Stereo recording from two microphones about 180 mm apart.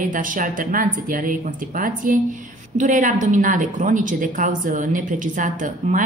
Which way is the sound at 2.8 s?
45° right (ahead or behind).